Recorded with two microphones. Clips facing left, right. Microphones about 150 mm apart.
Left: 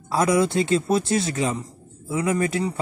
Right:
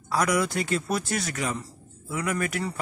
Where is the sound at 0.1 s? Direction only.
25° left (ahead or behind).